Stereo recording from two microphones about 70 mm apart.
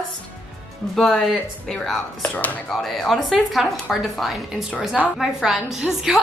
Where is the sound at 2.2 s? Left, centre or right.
Left.